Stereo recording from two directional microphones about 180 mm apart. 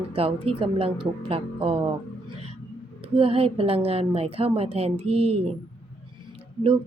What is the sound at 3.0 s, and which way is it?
A woman's voice, 30° right (ahead or behind).